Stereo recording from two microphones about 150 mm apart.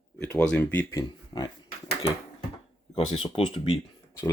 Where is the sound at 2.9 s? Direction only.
40° left (ahead or behind).